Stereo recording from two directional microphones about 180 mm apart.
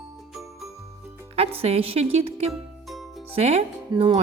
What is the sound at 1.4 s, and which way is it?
Speech, 35° right (ahead or behind).